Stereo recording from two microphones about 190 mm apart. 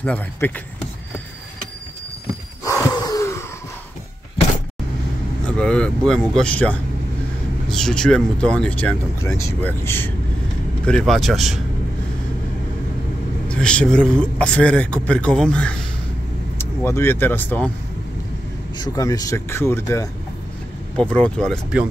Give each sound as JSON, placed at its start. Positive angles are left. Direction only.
{"t": 0.0, "sound": "speech", "side_deg": 5}
{"t": 2.6, "sound": "a sound", "side_deg": 15}
{"t": 5.6, "sound": "a man's voice", "side_deg": 5}
{"t": 13.5, "sound": "a man's voice", "side_deg": 5}
{"t": 18.8, "sound": "a man's voice", "side_deg": 20}